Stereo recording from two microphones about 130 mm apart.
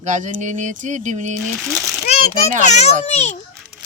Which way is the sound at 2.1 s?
55° left (ahead or behind).